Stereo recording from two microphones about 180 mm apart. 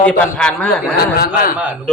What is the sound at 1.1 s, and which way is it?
Speech, 55° left (ahead or behind).